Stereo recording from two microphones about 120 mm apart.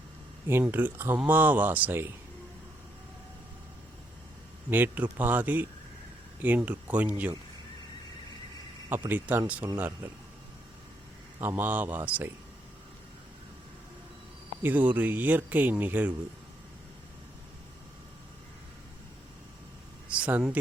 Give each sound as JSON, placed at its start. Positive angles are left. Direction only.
{"t": 0.6, "sound": "speech", "side_deg": -15}
{"t": 4.7, "sound": "speech", "side_deg": -15}
{"t": 8.9, "sound": "speech", "side_deg": -15}
{"t": 9.6, "sound": "speech", "side_deg": -30}
{"t": 11.3, "sound": "speech", "side_deg": -15}
{"t": 14.6, "sound": "speech", "side_deg": -15}
{"t": 20.1, "sound": "speech", "side_deg": -10}